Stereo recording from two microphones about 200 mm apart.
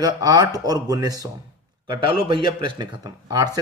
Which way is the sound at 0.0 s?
20° right (ahead or behind).